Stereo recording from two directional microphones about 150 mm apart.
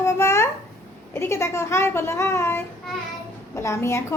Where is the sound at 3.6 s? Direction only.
20° left (ahead or behind).